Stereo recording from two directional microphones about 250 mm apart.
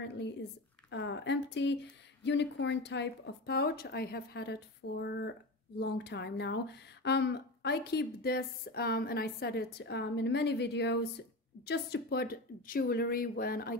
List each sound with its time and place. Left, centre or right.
0.2 s speech: left